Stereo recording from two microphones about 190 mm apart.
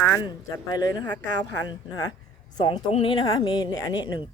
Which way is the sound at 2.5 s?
25° left (ahead or behind).